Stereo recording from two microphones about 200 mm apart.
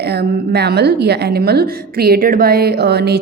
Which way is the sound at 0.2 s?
55° right (ahead or behind).